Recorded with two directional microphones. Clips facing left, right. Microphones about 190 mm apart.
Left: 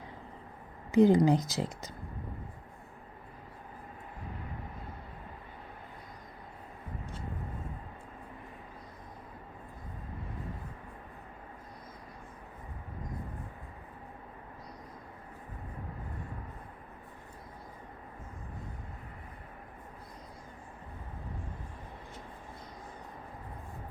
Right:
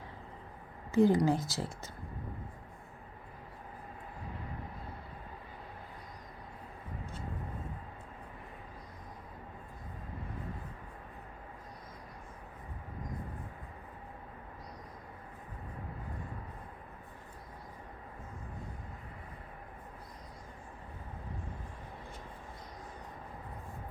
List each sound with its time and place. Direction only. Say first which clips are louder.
0.9 s speech: left 4 dB; 20° left (ahead or behind)